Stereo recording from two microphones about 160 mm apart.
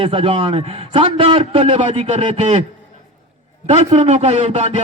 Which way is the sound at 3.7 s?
45° right (ahead or behind).